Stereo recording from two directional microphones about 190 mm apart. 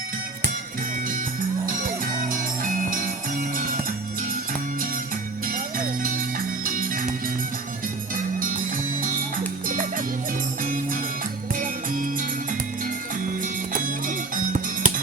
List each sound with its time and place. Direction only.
1.6 s music: 45° right (ahead or behind)
5.5 s music: 45° right (ahead or behind)
8.1 s music: 45° right (ahead or behind)
10.6 s music: 45° right (ahead or behind)